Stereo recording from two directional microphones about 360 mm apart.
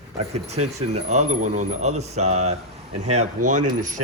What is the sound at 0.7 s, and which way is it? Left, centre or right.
Speech, centre.